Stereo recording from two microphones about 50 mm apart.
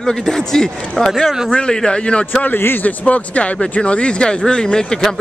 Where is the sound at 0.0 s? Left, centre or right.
Centre.